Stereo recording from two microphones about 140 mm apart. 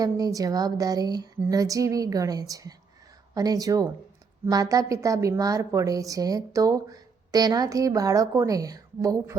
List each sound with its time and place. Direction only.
0.0 s a woman's voice: 25° right (ahead or behind)